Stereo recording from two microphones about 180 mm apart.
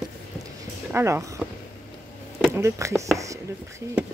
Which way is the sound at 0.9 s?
15° right (ahead or behind).